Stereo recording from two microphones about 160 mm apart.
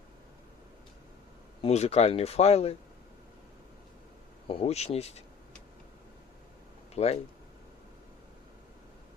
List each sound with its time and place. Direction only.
1.6 s speech: 40° left (ahead or behind)
4.4 s speech: 40° left (ahead or behind)
6.9 s speech: 40° left (ahead or behind)